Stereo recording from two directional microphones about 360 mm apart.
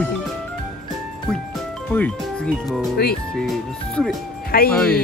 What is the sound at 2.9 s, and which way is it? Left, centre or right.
Speech, left.